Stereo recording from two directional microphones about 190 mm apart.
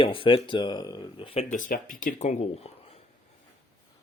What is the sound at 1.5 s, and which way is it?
Speech, 45° left (ahead or behind).